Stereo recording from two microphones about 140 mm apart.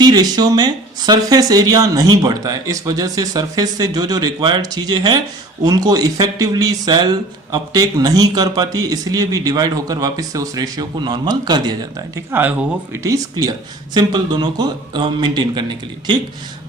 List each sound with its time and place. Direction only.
0.0 s speech: 30° right (ahead or behind)
12.3 s speech: 15° right (ahead or behind); by 15.6 s 35° right (ahead or behind)